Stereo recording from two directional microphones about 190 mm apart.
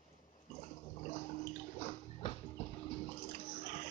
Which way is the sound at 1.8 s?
30° left (ahead or behind).